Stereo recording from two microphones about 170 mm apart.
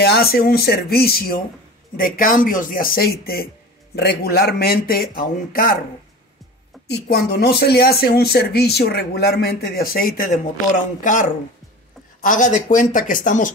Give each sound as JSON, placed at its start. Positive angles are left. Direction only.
{"t": 0.0, "sound": "speech", "side_deg": 65}
{"t": 6.9, "sound": "speech", "side_deg": 75}